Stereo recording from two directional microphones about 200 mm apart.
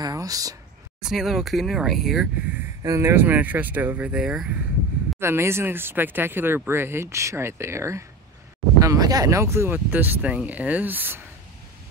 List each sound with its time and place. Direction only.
0.0 s speech: 20° right (ahead or behind)
1.0 s speech: centre (ahead or behind)
2.8 s speech: 15° right (ahead or behind)